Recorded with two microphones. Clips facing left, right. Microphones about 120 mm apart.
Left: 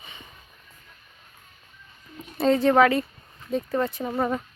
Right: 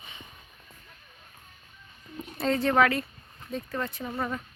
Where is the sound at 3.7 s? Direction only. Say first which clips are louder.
Left 6 dB; 35° left (ahead or behind).